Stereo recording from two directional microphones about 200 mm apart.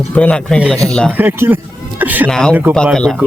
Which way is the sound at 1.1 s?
10° right (ahead or behind).